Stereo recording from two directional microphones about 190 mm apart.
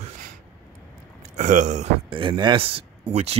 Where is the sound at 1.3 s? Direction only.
40° right (ahead or behind).